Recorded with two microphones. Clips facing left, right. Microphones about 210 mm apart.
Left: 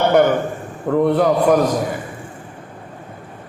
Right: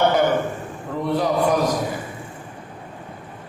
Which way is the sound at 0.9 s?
55° left (ahead or behind).